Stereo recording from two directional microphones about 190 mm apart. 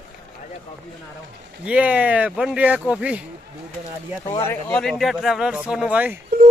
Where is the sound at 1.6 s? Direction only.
5° right (ahead or behind).